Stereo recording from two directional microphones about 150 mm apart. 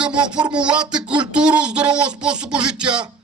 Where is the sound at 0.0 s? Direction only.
5° right (ahead or behind).